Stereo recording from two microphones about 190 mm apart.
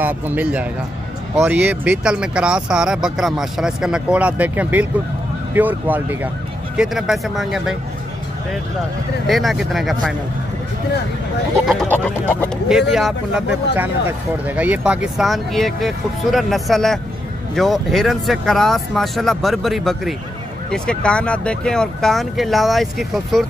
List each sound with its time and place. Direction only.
0.0 s speech: 10° right (ahead or behind)
9.3 s speech: centre (ahead or behind)
11.6 s speech: centre (ahead or behind)
12.9 s speech: 5° right (ahead or behind)